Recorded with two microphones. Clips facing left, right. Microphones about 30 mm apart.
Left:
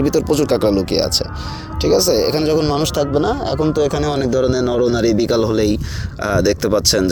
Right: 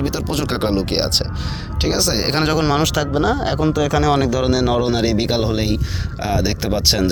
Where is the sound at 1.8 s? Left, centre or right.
Right.